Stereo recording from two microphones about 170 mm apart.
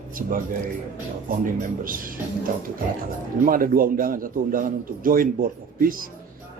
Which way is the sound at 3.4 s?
55° right (ahead or behind).